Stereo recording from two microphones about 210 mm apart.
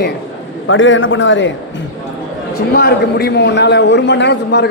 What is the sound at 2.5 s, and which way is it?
A man's voice, 50° left (ahead or behind).